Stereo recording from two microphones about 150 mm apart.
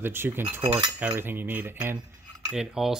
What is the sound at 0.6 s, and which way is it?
Cutlery, 30° right (ahead or behind).